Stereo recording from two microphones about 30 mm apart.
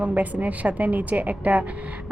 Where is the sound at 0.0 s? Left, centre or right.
Right.